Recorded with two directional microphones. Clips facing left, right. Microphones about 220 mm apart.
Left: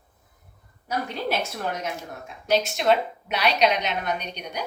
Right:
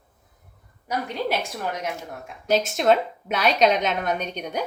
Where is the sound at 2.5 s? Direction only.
45° right (ahead or behind).